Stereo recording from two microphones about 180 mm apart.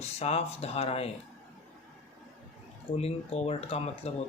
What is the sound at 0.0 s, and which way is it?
Speech, 35° left (ahead or behind).